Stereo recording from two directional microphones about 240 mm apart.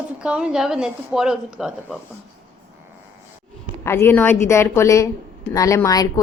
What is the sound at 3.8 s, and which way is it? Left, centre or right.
Speech, centre.